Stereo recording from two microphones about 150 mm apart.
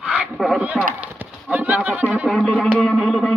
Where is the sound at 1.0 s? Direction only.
10° right (ahead or behind).